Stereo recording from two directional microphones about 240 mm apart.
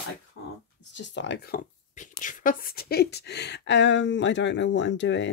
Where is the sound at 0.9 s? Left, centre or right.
Left.